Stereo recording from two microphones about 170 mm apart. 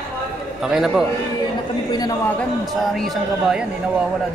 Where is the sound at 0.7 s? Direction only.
Centre (ahead or behind).